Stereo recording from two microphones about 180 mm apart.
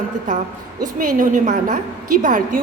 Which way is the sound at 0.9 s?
45° right (ahead or behind).